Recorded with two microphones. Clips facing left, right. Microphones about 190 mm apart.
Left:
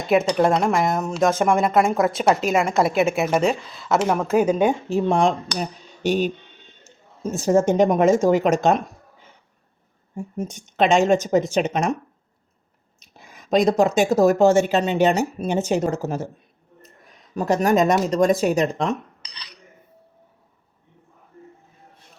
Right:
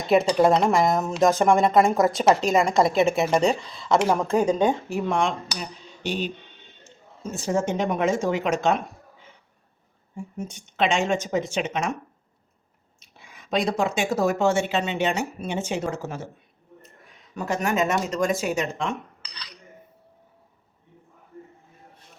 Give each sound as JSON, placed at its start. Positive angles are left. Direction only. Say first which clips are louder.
{"t": 0.3, "sound": "speech", "louder": "even", "side_deg": 0}
{"t": 4.9, "sound": "speech", "louder": "left 5 dB", "side_deg": 30}
{"t": 5.5, "sound": "a sound", "louder": "left 7 dB", "side_deg": 45}
{"t": 6.8, "sound": "speech", "louder": "left 6 dB", "side_deg": 45}
{"t": 10.2, "sound": "speech", "louder": "left 5 dB", "side_deg": 40}
{"t": 13.0, "sound": "speech", "louder": "left 3 dB", "side_deg": 40}
{"t": 17.3, "sound": "speech", "louder": "left 6 dB", "side_deg": 40}